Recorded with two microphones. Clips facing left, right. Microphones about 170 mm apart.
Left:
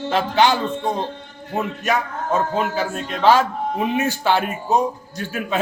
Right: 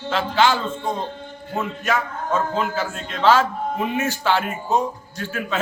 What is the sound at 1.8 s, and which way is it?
A man's voice, 15° left (ahead or behind).